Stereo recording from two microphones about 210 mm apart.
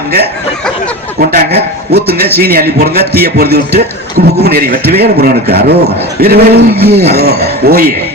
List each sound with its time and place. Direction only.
1.2 s speech: 45° right (ahead or behind)